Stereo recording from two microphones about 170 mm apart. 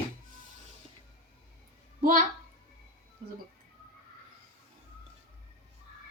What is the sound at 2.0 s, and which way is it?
Speech, 50° right (ahead or behind).